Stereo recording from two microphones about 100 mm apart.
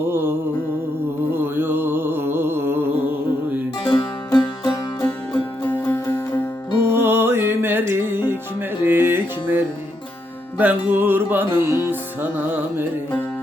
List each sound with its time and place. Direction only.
0.1 s music: 25° right (ahead or behind)
3.8 s music: 40° left (ahead or behind)
5.0 s music: 20° left (ahead or behind)
6.9 s music: 25° right (ahead or behind)